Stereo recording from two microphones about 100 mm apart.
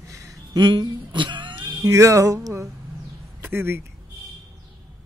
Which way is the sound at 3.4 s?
20° right (ahead or behind).